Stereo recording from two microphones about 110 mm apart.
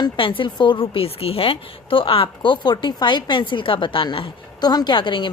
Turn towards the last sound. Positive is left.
turn(degrees=45)  # may be behind; listen again after turning